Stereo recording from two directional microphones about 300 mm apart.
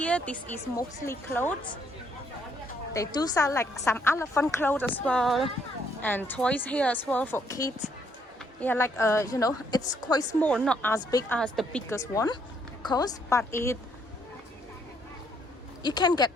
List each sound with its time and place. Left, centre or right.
0.0 s a woman's voice: centre
2.9 s a woman's voice: centre
15.8 s a woman's voice: centre